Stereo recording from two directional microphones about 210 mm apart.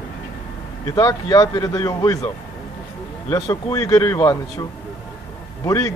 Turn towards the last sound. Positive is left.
turn(degrees=15)  # may be behind; listen again after turning